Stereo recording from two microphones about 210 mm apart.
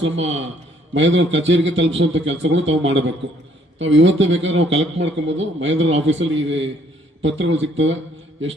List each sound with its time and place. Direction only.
0.0 s a man's voice: 65° right (ahead or behind)